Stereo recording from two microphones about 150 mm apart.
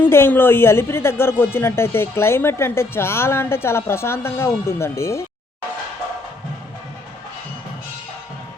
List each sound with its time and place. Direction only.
0.0 s speech: 15° left (ahead or behind)